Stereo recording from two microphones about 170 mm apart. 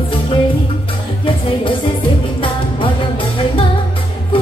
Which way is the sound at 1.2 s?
30° left (ahead or behind).